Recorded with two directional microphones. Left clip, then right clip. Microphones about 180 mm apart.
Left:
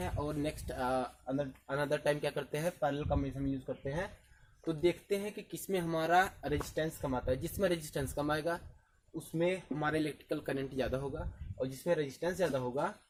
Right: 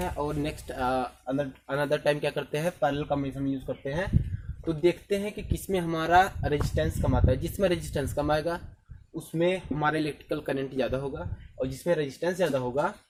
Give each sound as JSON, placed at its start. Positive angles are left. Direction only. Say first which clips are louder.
{"t": 0.0, "sound": "speech", "louder": "right 7 dB", "side_deg": 20}
{"t": 4.6, "sound": "speech", "louder": "right 7 dB", "side_deg": 20}